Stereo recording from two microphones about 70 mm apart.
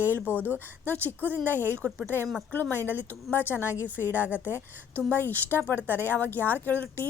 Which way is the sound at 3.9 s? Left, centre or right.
Right.